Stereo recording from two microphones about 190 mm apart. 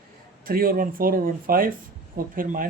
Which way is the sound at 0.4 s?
50° right (ahead or behind).